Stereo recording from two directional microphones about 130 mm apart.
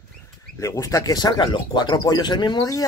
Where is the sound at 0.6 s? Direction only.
25° left (ahead or behind).